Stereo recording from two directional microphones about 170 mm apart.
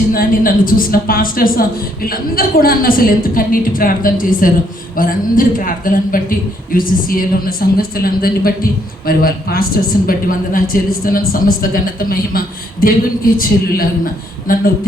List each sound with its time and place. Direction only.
0.1 s speech: 55° left (ahead or behind)